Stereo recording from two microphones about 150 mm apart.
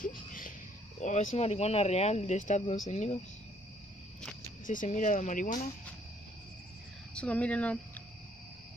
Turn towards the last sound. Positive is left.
turn(degrees=10)  # may be behind; listen again after turning